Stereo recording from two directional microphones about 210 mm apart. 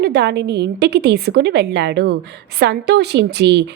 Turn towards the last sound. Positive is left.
turn(degrees=-55)  # may be behind; listen again after turning